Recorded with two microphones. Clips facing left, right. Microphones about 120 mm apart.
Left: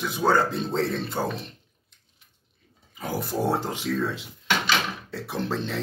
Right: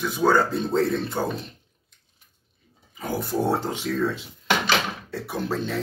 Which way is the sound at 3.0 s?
Centre (ahead or behind).